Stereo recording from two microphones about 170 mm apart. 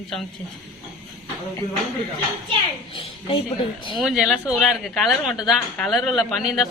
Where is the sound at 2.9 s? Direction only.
35° left (ahead or behind).